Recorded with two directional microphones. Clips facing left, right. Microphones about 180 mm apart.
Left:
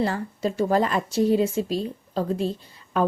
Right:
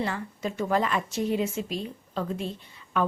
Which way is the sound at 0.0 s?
35° left (ahead or behind).